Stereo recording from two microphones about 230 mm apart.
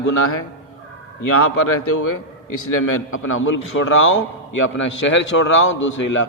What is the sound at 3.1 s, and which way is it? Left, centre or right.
A man's voice, left.